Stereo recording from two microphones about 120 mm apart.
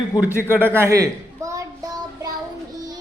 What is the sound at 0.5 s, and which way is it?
Child singing, 20° right (ahead or behind).